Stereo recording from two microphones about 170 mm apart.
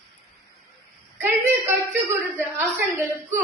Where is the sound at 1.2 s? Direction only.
15° right (ahead or behind).